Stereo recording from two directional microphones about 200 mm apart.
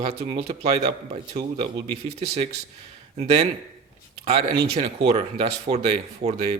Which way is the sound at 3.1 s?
30° right (ahead or behind).